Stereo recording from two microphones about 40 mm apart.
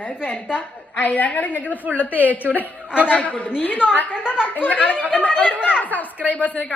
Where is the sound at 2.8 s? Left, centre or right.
Right.